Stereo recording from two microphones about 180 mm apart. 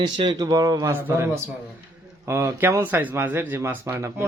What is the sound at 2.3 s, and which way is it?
Speech, 15° right (ahead or behind).